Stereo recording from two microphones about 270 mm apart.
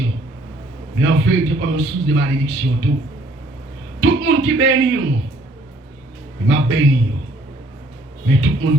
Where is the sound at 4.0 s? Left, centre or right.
Right.